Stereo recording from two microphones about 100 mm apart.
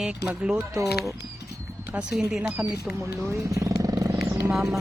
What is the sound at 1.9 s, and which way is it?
Speech, 10° right (ahead or behind).